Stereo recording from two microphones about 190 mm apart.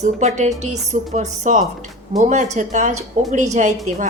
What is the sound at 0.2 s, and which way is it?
A woman's voice, 40° right (ahead or behind).